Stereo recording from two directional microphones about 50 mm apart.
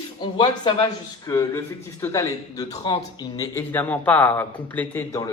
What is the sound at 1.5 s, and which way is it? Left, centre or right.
Speech, left.